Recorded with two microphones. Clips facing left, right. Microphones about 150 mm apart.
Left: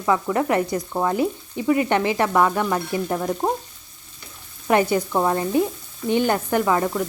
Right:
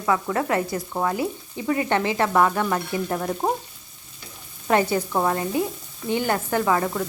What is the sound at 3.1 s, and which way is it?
Speech, centre (ahead or behind).